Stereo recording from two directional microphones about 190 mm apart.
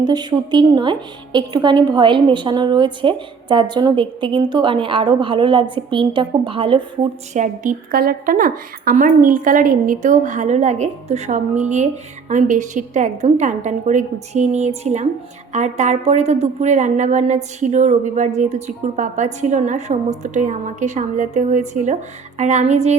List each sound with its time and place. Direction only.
0.0 s a woman's voice: 20° right (ahead or behind)
7.3 s a woman's voice: 40° right (ahead or behind)